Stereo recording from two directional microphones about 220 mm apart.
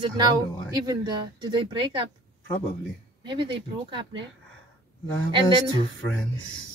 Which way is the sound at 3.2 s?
20° right (ahead or behind).